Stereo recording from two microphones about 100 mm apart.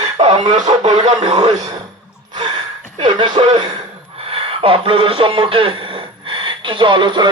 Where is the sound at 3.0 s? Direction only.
50° right (ahead or behind).